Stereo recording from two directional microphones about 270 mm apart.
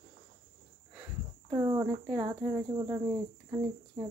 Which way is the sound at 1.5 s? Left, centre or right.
Centre.